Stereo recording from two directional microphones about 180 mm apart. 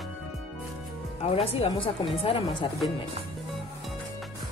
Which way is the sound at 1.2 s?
35° left (ahead or behind).